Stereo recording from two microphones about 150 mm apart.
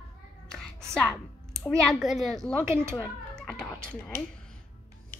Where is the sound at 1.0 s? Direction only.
5° left (ahead or behind).